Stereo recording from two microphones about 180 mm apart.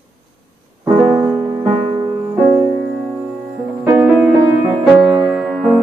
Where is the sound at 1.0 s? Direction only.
5° right (ahead or behind).